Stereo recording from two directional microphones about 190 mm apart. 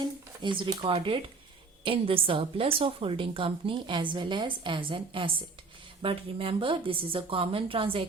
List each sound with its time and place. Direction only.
0.4 s a woman's voice: 25° right (ahead or behind)